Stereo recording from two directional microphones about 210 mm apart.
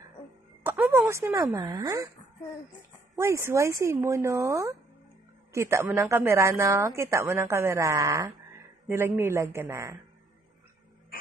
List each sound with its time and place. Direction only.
0.7 s a sound: 10° right (ahead or behind)
1.5 s speech: 20° right (ahead or behind)
3.2 s speech: 15° right (ahead or behind)